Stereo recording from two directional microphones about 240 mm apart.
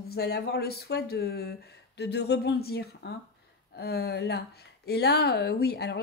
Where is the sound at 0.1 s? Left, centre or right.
Left.